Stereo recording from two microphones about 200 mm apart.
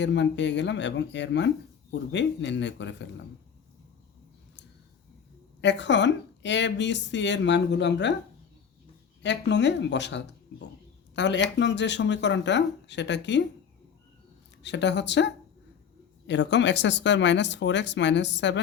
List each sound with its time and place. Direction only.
0.0 s speech: 65° left (ahead or behind)
5.5 s speech: 60° left (ahead or behind)
9.2 s speech: 60° left (ahead or behind)
14.6 s speech: 60° left (ahead or behind)